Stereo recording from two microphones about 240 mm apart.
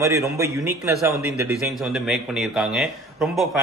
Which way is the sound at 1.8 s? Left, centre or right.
Centre.